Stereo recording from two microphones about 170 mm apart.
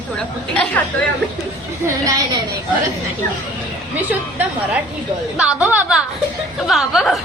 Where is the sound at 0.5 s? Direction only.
10° left (ahead or behind).